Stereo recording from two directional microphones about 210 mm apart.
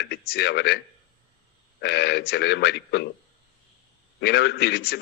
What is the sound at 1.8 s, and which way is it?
A man's voice, 50° left (ahead or behind).